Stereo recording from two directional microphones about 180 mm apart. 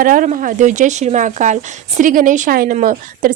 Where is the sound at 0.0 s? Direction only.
50° right (ahead or behind).